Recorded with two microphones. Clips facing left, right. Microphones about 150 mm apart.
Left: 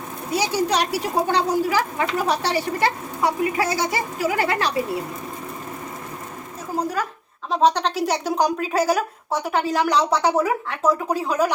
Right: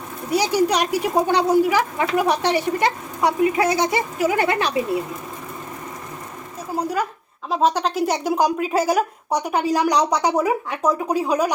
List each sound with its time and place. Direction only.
0.5 s a woman's voice: 15° right (ahead or behind)
6.7 s speech: 10° right (ahead or behind)